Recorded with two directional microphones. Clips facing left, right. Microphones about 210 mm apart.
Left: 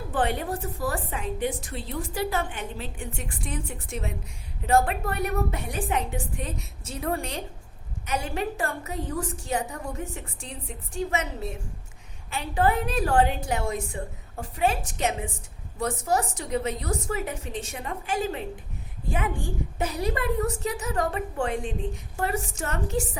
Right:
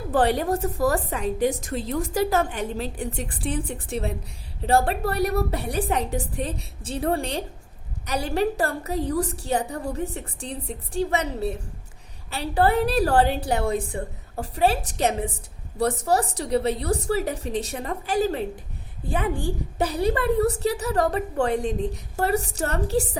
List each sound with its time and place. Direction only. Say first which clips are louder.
0.1 s a woman's voice: right 6 dB; 35° right (ahead or behind)